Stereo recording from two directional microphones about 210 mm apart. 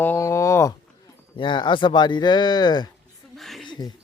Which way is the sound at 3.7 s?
20° left (ahead or behind).